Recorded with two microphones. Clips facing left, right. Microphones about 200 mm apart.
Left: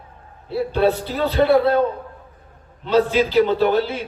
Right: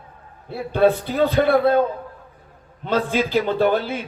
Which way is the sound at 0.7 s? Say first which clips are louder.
Right 3 dB; 50° right (ahead or behind).